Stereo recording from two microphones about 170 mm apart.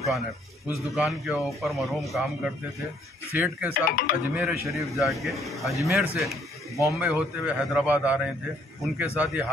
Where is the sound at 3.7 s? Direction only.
55° left (ahead or behind).